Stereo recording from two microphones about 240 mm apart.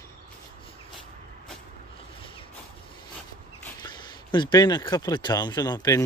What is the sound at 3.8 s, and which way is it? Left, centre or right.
Speech, centre.